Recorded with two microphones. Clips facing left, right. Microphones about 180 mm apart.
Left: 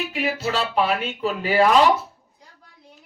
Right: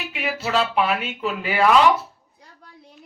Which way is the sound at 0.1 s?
35° left (ahead or behind).